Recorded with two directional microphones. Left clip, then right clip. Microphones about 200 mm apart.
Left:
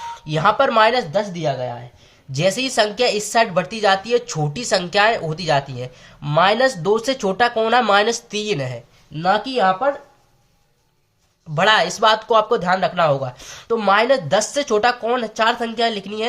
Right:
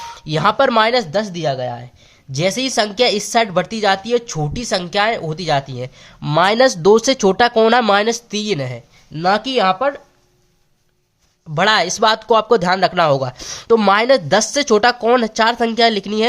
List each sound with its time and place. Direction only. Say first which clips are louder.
0.0 s a woman's voice: right 1 dB; 40° right (ahead or behind)
2.3 s a woman's voice: right 1 dB; 30° right (ahead or behind)
11.5 s a woman's voice: right 1 dB; 30° right (ahead or behind)